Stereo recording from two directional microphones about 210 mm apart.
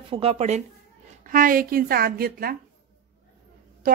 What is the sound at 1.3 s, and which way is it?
A woman's voice, 40° right (ahead or behind).